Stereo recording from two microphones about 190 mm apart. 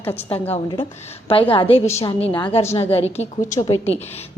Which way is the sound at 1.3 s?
30° left (ahead or behind).